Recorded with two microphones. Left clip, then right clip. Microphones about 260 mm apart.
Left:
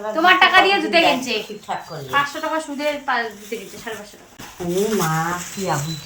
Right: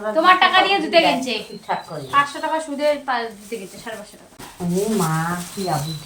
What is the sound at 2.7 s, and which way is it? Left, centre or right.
Speech, centre.